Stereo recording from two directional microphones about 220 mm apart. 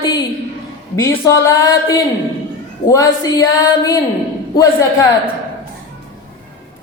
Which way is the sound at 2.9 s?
15° left (ahead or behind).